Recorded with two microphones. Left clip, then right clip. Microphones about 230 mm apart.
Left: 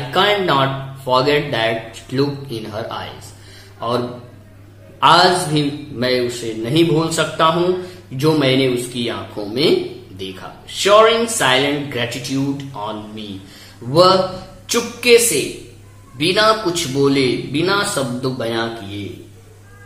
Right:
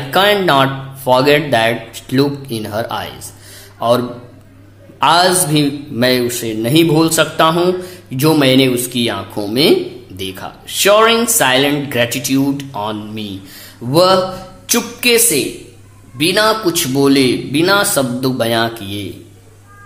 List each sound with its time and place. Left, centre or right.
0.1 s speech: right
5.0 s speech: right
14.7 s speech: right